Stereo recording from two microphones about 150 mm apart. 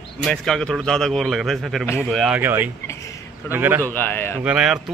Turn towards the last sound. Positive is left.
turn(degrees=-5)  # may be behind; listen again after turning